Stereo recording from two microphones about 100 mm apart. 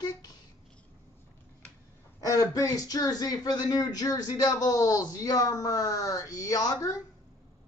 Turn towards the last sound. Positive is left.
turn(degrees=35)  # may be behind; listen again after turning